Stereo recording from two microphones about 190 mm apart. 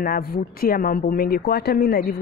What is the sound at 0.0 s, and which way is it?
A woman's voice, 50° left (ahead or behind).